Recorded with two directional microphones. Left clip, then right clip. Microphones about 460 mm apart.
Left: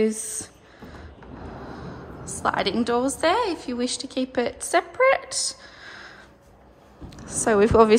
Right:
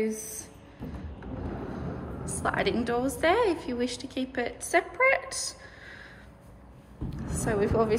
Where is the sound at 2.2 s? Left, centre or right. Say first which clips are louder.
Left 4 dB; centre.